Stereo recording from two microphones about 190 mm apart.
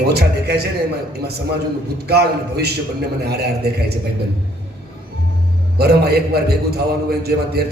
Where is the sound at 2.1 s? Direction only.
60° right (ahead or behind).